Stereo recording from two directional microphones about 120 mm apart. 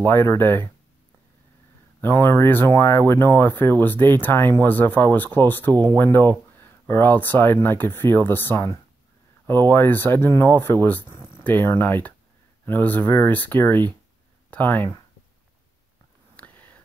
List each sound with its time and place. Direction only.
0.0 s speech: 20° left (ahead or behind)
2.0 s speech: 20° left (ahead or behind)
16.3 s a sound: 15° left (ahead or behind)